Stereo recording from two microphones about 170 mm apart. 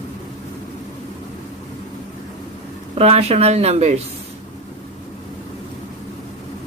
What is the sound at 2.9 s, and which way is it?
Speech, 40° right (ahead or behind).